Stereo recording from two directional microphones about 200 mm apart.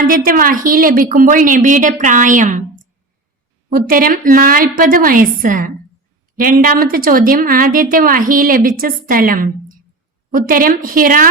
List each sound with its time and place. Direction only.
0.0 s a woman's voice: 45° right (ahead or behind)